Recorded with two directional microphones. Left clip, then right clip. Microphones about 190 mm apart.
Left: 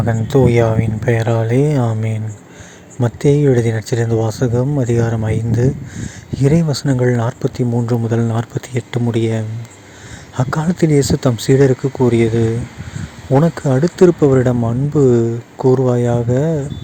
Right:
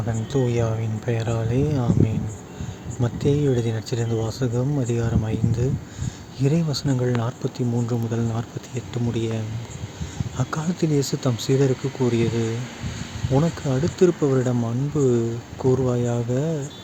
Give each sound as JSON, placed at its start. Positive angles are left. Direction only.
{"t": 0.0, "sound": "speech", "side_deg": 40}